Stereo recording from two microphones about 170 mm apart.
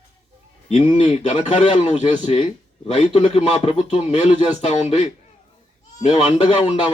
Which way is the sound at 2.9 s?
35° left (ahead or behind).